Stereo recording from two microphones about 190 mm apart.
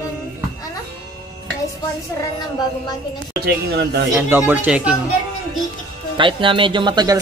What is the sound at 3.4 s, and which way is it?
Speech, 55° right (ahead or behind).